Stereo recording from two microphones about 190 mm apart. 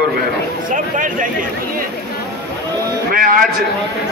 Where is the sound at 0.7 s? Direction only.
45° right (ahead or behind).